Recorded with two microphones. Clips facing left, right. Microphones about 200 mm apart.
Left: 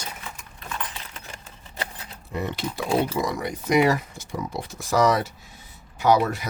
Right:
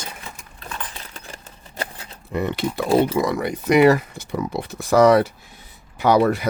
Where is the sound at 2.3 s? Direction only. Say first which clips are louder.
Right 6 dB; 60° right (ahead or behind).